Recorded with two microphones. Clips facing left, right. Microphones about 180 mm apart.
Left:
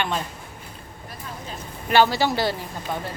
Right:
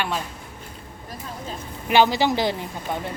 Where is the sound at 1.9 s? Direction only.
15° right (ahead or behind).